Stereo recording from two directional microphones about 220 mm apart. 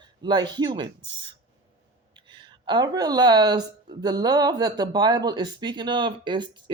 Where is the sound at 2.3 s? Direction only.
20° right (ahead or behind).